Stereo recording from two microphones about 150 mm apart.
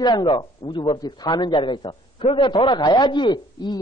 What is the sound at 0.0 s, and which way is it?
A man's voice, 30° left (ahead or behind).